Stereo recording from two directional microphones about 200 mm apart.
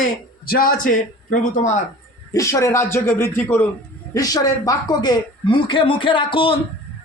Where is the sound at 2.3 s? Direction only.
15° left (ahead or behind).